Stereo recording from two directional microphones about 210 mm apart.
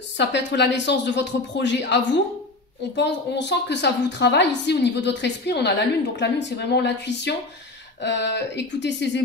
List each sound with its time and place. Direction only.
0.2 s a woman's voice: 55° left (ahead or behind)
3.0 s a woman's voice: 55° left (ahead or behind)